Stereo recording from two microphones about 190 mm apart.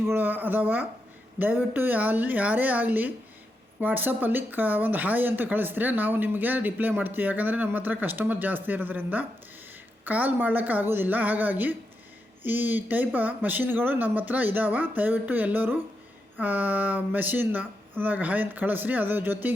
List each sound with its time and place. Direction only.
0.1 s speech: 10° right (ahead or behind)